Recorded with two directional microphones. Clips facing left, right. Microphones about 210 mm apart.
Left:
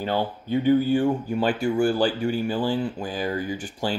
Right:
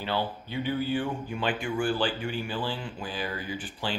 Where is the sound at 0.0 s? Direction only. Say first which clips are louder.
Left 5 dB; 45° left (ahead or behind).